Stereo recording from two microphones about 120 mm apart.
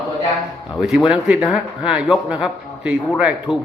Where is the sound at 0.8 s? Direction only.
5° right (ahead or behind).